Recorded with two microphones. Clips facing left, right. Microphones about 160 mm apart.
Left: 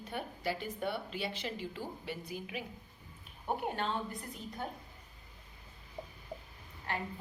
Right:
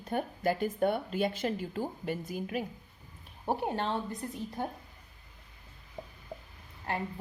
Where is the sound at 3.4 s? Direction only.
30° right (ahead or behind).